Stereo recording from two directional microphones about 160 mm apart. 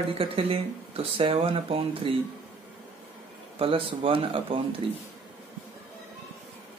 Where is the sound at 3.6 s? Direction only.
35° right (ahead or behind).